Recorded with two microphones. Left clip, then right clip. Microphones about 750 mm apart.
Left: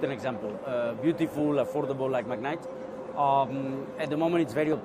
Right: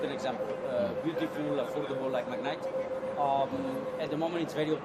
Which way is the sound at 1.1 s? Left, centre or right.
Left.